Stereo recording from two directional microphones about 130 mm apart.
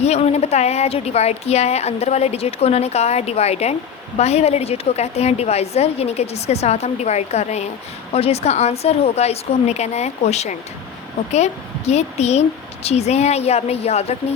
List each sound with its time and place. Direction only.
0.0 s speech: 55° left (ahead or behind)